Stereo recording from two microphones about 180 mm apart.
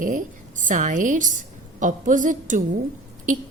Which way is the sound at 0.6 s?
45° right (ahead or behind).